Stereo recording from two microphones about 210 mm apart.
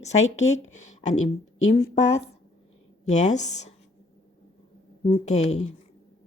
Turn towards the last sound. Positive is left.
turn(degrees=30)  # may be behind; listen again after turning